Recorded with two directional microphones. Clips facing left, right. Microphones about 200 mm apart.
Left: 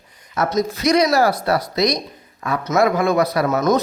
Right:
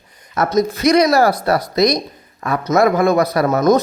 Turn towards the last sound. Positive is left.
turn(degrees=-35)  # may be behind; listen again after turning